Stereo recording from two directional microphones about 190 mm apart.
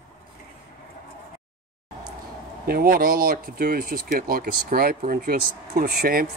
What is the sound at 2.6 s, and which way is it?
Speech, 50° right (ahead or behind).